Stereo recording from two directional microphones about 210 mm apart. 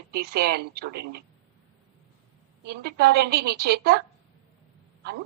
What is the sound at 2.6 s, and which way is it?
A woman's voice, 50° right (ahead or behind).